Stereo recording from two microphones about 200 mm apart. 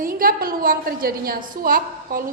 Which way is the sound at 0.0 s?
45° right (ahead or behind).